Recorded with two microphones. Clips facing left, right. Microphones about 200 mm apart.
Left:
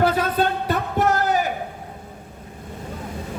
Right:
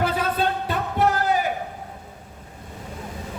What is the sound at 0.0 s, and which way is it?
Music, 45° left (ahead or behind).